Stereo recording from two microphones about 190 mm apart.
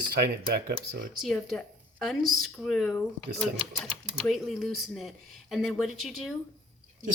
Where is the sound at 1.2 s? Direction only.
Centre (ahead or behind).